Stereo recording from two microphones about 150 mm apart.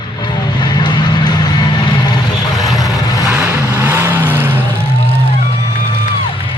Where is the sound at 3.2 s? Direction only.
15° right (ahead or behind).